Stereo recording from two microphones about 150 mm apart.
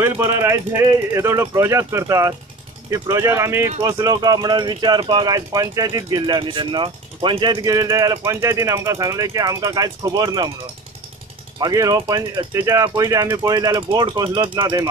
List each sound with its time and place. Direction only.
0.0 s speech: 20° right (ahead or behind)
11.6 s speech: 25° right (ahead or behind)